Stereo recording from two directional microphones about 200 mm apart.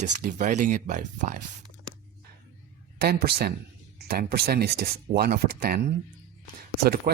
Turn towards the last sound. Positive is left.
turn(degrees=-50)  # may be behind; listen again after turning